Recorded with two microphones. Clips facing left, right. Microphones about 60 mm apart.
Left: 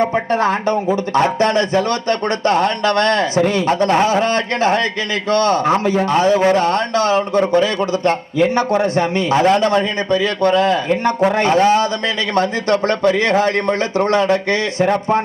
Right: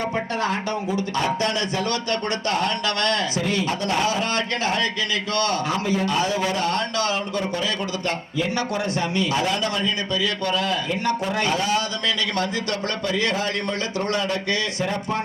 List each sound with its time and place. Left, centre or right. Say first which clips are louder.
0.0 s a man's voice: left 9 dB; left